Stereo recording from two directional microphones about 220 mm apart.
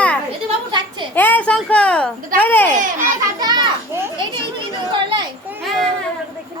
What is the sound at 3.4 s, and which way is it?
Children playing, 20° right (ahead or behind).